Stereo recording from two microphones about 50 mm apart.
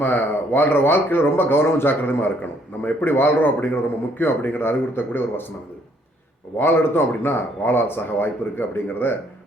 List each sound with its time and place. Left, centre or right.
0.0 s speech: left
6.6 s speech: left